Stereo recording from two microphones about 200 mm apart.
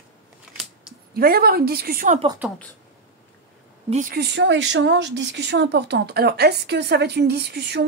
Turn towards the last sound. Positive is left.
turn(degrees=-55)  # may be behind; listen again after turning